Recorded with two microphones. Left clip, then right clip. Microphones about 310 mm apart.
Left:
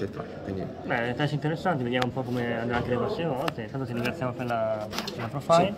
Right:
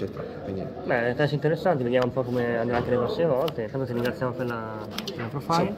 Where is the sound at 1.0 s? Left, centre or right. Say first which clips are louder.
Right 5 dB; left.